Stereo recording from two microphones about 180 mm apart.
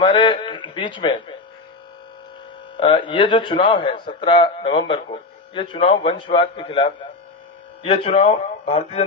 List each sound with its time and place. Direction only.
0.0 s a man's voice: 30° left (ahead or behind)
2.7 s a man's voice: 30° left (ahead or behind)